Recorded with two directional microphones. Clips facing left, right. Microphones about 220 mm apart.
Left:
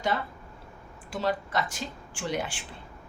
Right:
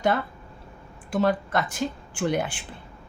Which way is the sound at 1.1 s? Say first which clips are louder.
Right 6 dB; 55° right (ahead or behind).